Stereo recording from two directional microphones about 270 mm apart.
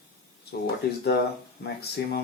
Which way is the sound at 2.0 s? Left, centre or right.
Left.